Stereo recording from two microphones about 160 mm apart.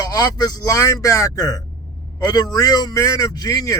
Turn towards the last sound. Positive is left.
turn(degrees=25)  # may be behind; listen again after turning